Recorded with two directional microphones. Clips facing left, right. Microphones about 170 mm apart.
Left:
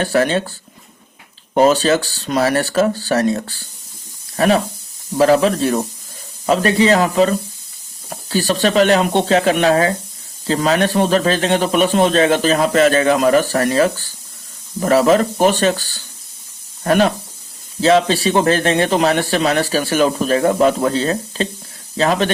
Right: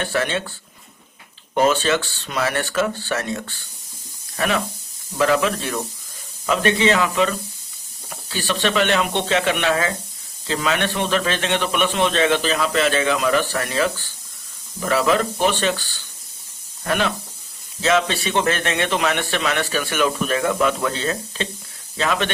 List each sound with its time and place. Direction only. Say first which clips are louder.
0.0 s a man's voice: left 7 dB; 40° left (ahead or behind)
1.5 s a man's voice: left 5 dB; 35° left (ahead or behind)